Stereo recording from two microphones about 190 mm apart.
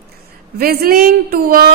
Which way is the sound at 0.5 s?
50° right (ahead or behind).